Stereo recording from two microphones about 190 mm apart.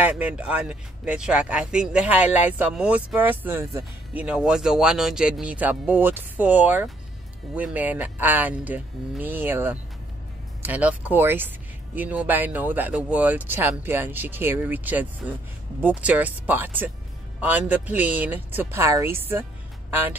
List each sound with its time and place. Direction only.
0.0 s speech: 5° right (ahead or behind)